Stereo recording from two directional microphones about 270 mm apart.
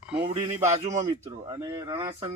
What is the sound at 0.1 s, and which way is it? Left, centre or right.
Speech, centre.